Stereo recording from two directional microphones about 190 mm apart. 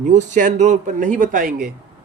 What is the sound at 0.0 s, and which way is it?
Speech, 40° right (ahead or behind).